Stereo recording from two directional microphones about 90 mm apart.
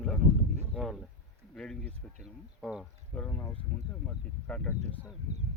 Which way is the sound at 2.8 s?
15° left (ahead or behind).